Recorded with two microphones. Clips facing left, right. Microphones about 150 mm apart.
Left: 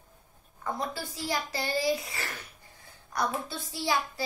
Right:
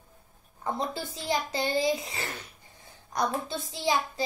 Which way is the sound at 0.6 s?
25° right (ahead or behind).